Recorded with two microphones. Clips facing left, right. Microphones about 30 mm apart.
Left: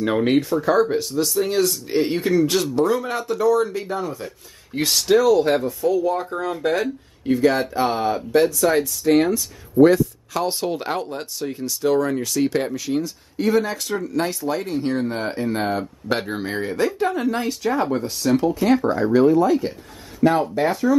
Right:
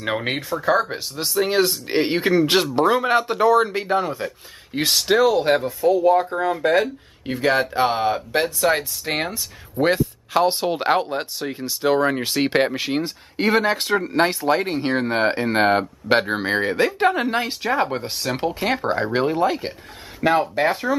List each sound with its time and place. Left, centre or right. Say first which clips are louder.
0.0 s speech: left 4 dB; right
0.3 s speech: left 6 dB; centre
0.6 s speech: left 2 dB; right
5.0 s speech: left 2 dB; right
6.3 s speech: right 3 dB; centre; by 15.8 s right
16.1 s speech: right 5 dB; right
20.2 s speech: left 1 dB; right
20.5 s speech: left 1 dB; right